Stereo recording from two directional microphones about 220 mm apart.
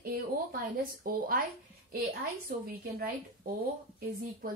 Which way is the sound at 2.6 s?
40° right (ahead or behind).